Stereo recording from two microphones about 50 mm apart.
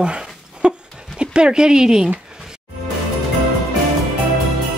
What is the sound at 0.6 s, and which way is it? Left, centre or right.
Dog, centre.